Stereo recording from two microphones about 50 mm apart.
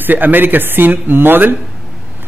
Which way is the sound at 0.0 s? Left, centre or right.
Right.